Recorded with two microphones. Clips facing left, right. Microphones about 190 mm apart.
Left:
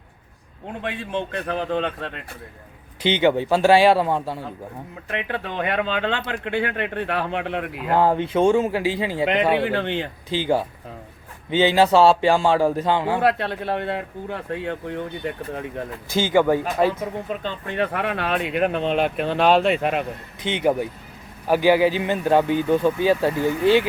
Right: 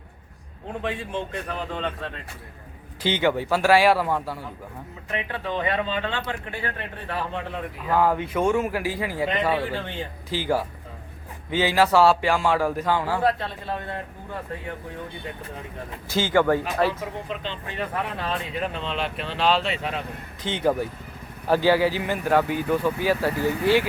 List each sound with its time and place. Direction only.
1.5 s speech: 65° left (ahead or behind)
3.0 s a man's voice: 20° left (ahead or behind)
5.1 s speech: 65° left (ahead or behind)
7.9 s a man's voice: 30° left (ahead or behind)
9.6 s speech: 70° left (ahead or behind)
10.2 s a man's voice: 20° left (ahead or behind)
13.2 s speech: 75° left (ahead or behind)
16.0 s speech: 15° left (ahead or behind)
17.2 s speech: 45° left (ahead or behind)
17.7 s speech: 70° left (ahead or behind)
20.4 s a man's voice: 20° left (ahead or behind)